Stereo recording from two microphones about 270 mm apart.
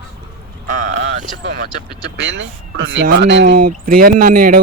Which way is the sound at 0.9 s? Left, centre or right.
Right.